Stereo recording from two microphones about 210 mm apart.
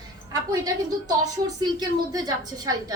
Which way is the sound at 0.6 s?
20° right (ahead or behind).